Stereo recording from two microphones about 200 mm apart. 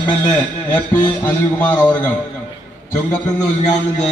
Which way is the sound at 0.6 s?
10° left (ahead or behind).